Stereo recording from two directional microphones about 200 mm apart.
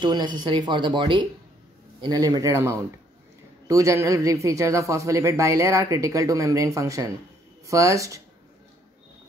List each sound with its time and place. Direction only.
0.0 s a man's voice: 20° right (ahead or behind)